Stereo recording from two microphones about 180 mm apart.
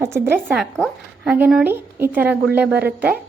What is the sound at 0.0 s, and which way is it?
Speech, 15° right (ahead or behind).